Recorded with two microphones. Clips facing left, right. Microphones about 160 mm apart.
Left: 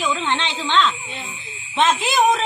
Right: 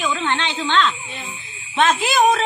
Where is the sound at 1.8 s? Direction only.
20° left (ahead or behind).